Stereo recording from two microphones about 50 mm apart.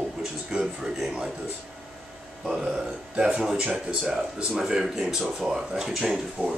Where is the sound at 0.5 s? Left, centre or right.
Centre.